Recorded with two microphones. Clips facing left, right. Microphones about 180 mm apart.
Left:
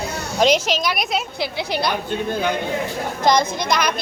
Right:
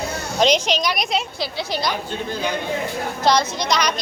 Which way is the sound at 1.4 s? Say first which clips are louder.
Left 2 dB; 15° left (ahead or behind).